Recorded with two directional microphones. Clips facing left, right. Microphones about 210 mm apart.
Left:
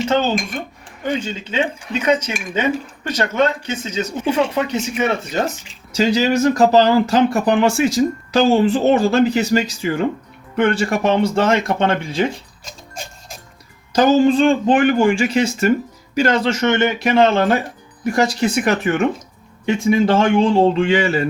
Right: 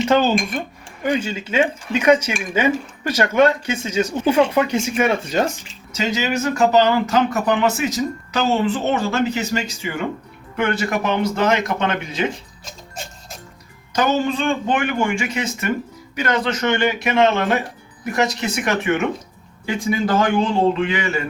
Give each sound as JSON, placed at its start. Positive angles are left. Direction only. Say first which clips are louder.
{"t": 1.2, "sound": "speech", "louder": "right 2 dB", "side_deg": -10}
{"t": 5.9, "sound": "speech", "louder": "left 6 dB", "side_deg": 35}
{"t": 13.9, "sound": "a man's voice", "louder": "left 7 dB", "side_deg": 30}
{"t": 17.0, "sound": "a man's voice", "louder": "left 4 dB", "side_deg": 35}